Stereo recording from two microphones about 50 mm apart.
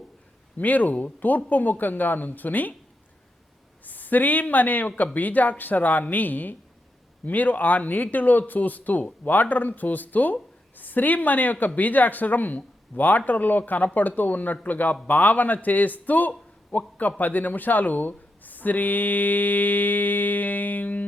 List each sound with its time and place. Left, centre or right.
0.6 s mantra: left
3.8 s speech: left
5.1 s mantra: left